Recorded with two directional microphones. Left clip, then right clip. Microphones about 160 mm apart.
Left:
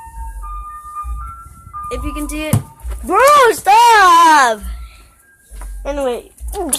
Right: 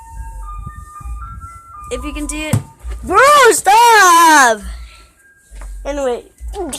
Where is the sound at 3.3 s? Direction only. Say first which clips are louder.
Right 1 dB; 50° right (ahead or behind).